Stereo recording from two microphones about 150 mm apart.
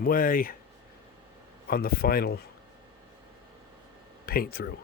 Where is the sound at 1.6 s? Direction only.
90° left.